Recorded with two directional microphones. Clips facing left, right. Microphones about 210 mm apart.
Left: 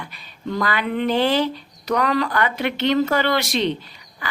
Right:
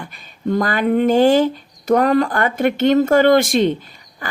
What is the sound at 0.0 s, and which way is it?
A woman's voice, 45° right (ahead or behind).